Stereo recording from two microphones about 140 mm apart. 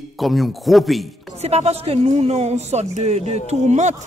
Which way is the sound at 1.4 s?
50° right (ahead or behind).